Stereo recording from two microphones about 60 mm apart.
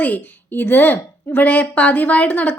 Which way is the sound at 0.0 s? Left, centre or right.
Left.